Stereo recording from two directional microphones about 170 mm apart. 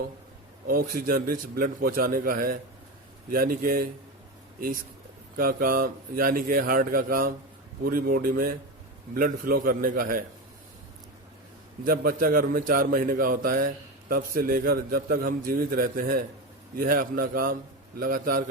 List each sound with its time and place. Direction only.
0.7 s a man's voice: 60° right (ahead or behind)
5.4 s a man's voice: 60° right (ahead or behind)
11.9 s a man's voice: 60° right (ahead or behind)